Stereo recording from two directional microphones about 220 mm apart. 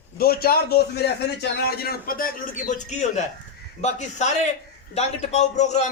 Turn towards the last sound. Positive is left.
turn(degrees=30)  # may be behind; listen again after turning